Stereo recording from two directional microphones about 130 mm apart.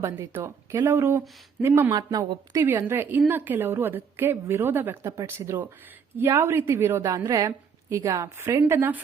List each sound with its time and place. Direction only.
0.0 s a woman's voice: 20° right (ahead or behind)
1.9 s a woman's voice: 30° right (ahead or behind)